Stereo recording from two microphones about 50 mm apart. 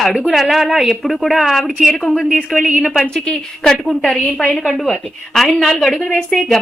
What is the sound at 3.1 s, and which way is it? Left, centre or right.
A woman's voice, centre.